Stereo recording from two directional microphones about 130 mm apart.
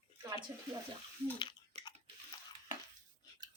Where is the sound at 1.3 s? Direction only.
35° left (ahead or behind).